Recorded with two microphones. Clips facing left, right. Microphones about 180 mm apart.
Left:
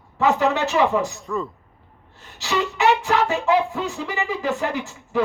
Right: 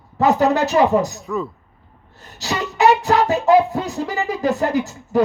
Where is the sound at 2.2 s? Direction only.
40° right (ahead or behind).